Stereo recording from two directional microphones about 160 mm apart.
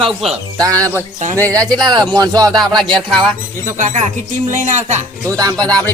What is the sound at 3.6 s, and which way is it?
Speech, 50° right (ahead or behind).